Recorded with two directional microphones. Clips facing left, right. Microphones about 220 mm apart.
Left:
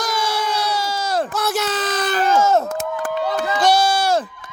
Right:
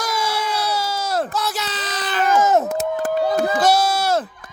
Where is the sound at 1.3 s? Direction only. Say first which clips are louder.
Left 4 dB; 50° left (ahead or behind).